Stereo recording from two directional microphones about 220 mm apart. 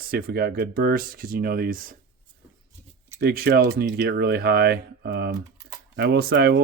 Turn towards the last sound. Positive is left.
turn(degrees=-50)  # may be behind; listen again after turning